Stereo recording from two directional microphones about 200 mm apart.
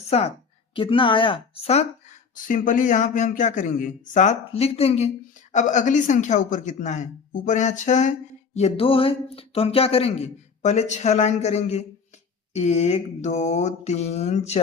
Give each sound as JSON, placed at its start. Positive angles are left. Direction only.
{"t": 0.7, "sound": "speech", "side_deg": 25}